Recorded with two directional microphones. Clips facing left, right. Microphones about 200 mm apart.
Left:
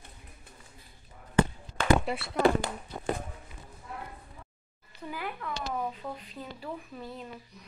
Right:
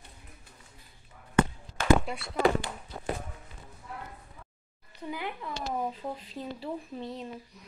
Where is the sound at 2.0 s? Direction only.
5° left (ahead or behind).